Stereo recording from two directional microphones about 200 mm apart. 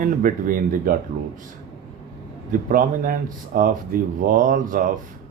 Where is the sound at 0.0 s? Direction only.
40° right (ahead or behind).